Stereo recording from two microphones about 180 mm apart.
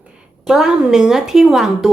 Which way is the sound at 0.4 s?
Centre (ahead or behind).